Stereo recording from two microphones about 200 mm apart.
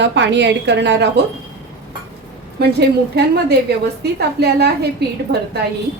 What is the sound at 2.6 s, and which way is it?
A woman's voice, 55° right (ahead or behind).